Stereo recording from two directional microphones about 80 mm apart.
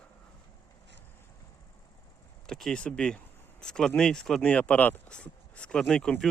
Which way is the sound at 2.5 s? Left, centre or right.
Centre.